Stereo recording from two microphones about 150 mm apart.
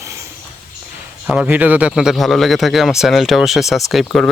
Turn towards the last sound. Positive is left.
turn(degrees=0)  # may be behind; listen again after turning